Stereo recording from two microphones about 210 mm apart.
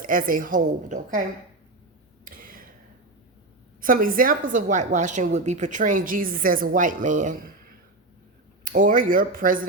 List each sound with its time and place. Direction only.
0.0 s a woman's voice: 40° right (ahead or behind)
2.2 s a sound: 40° right (ahead or behind)
3.8 s a woman's voice: 40° right (ahead or behind)
8.6 s a woman's voice: 40° right (ahead or behind)